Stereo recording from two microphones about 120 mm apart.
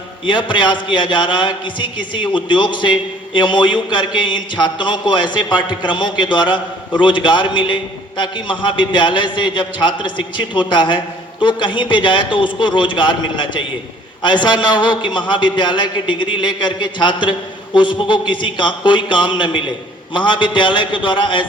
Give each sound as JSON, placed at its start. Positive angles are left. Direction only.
{"t": 0.3, "sound": "a man's voice", "side_deg": 40}